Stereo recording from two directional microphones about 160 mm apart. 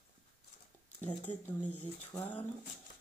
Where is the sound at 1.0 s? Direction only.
10° left (ahead or behind).